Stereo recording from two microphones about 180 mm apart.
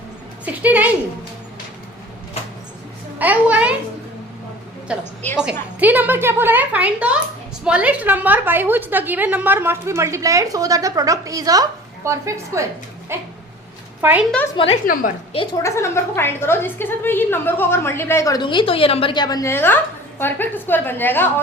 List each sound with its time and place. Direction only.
0.4 s a woman's voice: 10° right (ahead or behind)
3.2 s a sound: 10° right (ahead or behind)
4.9 s a woman's voice: 5° right (ahead or behind)
14.5 s a woman's voice: 30° left (ahead or behind)
15.5 s a woman's voice: 15° left (ahead or behind)